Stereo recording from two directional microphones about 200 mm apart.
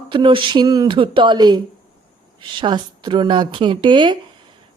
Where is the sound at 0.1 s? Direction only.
25° right (ahead or behind).